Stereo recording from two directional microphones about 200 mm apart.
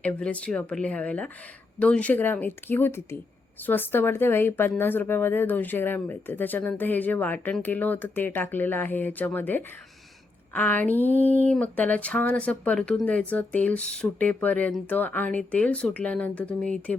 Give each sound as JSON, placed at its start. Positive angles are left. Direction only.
{"t": 0.0, "sound": "speech", "side_deg": 5}